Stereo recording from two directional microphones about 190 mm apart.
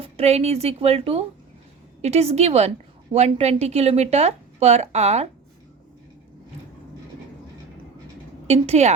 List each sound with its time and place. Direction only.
0.0 s a woman's voice: 30° right (ahead or behind)
8.4 s a woman's voice: 35° right (ahead or behind)